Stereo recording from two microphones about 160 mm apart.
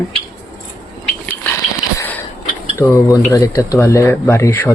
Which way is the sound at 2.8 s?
20° left (ahead or behind).